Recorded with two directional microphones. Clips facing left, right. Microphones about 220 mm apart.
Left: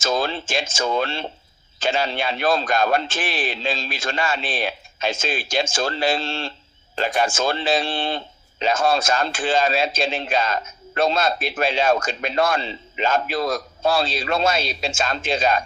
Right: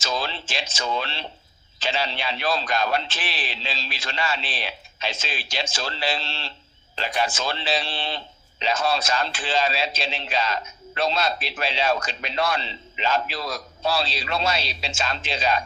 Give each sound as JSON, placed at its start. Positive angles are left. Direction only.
{"t": 0.0, "sound": "a man's voice", "side_deg": 50}